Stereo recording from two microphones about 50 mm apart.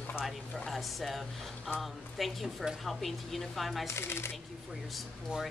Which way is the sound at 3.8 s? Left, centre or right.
Left.